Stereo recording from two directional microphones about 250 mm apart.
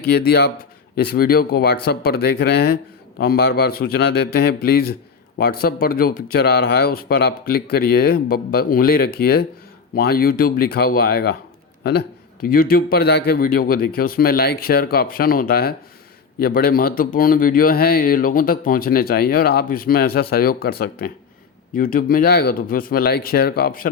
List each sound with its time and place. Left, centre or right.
0.0 s speech: left